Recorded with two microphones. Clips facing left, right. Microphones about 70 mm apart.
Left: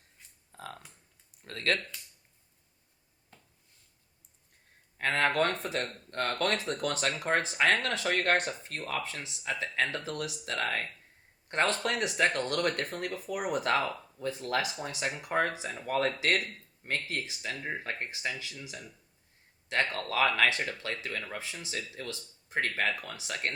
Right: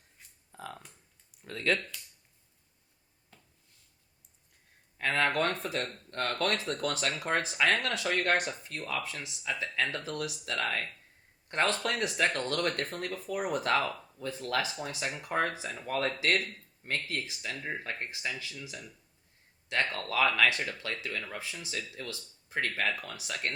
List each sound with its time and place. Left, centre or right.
1.5 s speech: left
4.9 s a sound: left
5.4 s speech: left